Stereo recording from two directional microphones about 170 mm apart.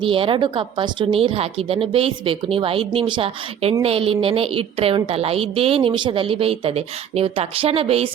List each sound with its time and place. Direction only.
0.0 s a woman's voice: 30° right (ahead or behind)